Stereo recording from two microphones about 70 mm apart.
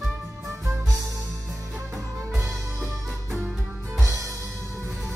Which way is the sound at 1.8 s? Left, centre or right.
Right.